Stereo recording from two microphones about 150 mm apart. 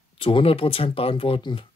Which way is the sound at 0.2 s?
35° left (ahead or behind).